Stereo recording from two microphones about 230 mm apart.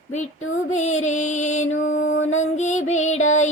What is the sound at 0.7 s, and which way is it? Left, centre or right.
Music, left.